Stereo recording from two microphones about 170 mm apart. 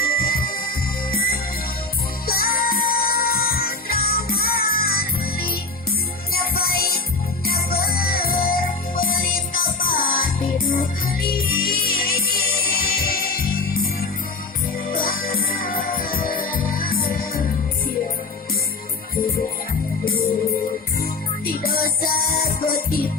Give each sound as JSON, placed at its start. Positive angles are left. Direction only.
{"t": 0.0, "sound": "music", "side_deg": 60}
{"t": 21.0, "sound": "music", "side_deg": 60}